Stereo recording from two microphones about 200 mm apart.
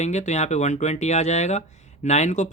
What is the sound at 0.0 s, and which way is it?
Speech, 35° left (ahead or behind).